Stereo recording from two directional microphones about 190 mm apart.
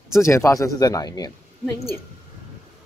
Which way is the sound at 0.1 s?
15° left (ahead or behind).